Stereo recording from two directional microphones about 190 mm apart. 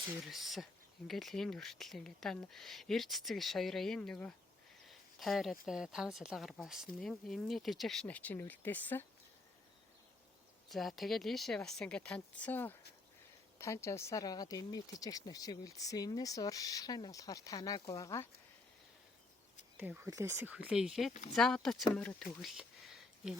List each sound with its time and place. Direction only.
0.2 s speech: centre (ahead or behind)
4.9 s a sound: centre (ahead or behind)
5.6 s speech: 5° right (ahead or behind)
10.7 s speech: centre (ahead or behind); by 18.3 s 15° left (ahead or behind)
19.7 s speech: 10° right (ahead or behind)